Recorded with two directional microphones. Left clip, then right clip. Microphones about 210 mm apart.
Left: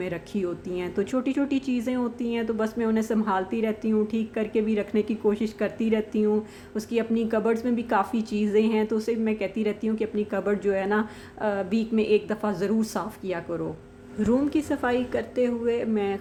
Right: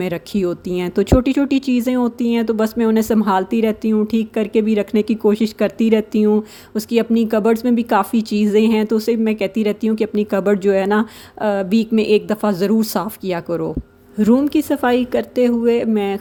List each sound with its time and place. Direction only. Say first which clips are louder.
0.0 s speech: right 9 dB; 45° right (ahead or behind)